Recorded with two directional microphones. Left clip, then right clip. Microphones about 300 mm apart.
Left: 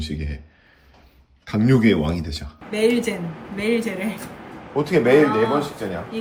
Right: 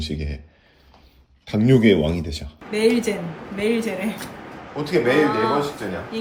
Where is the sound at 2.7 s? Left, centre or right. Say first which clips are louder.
Even; centre.